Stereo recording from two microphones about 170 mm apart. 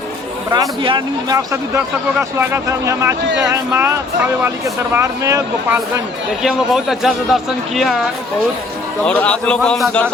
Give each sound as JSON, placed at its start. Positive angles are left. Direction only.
{"t": 0.5, "sound": "speech", "side_deg": -25}
{"t": 6.4, "sound": "a man's voice", "side_deg": 0}
{"t": 9.0, "sound": "a man's voice", "side_deg": 5}